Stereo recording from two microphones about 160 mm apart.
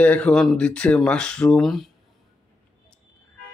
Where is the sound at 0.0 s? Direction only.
5° left (ahead or behind).